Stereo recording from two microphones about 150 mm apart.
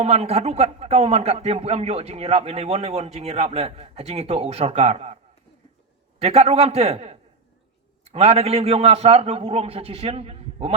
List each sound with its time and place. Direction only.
0.0 s a man's voice: 45° right (ahead or behind)